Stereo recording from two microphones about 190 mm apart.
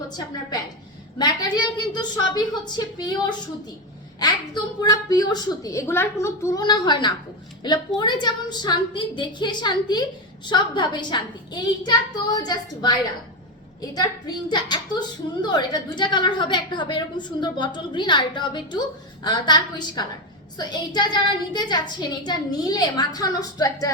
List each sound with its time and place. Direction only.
1.2 s a woman's voice: 20° left (ahead or behind)